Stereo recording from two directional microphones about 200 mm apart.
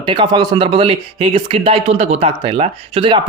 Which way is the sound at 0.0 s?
25° right (ahead or behind).